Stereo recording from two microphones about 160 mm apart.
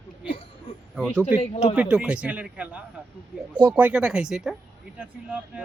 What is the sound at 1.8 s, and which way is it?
A man's voice, 5° right (ahead or behind).